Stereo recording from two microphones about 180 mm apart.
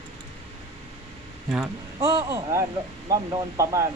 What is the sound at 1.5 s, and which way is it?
Speech, 5° right (ahead or behind).